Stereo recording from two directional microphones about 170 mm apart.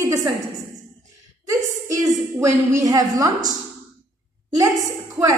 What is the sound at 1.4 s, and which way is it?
A woman's voice, 20° right (ahead or behind).